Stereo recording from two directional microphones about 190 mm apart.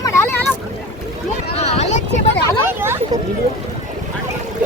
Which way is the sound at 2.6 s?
10° right (ahead or behind).